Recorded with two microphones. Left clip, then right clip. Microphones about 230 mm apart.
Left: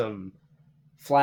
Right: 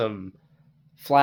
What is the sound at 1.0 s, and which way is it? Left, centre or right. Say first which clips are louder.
Speech: right 2 dB; right.